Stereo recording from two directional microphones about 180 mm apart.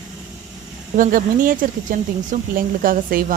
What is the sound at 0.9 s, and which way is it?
Speech, 50° right (ahead or behind).